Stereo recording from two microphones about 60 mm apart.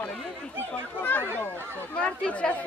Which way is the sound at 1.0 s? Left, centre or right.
Left.